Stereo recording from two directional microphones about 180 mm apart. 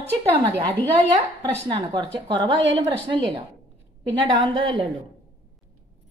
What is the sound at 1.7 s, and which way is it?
Speech, 25° right (ahead or behind).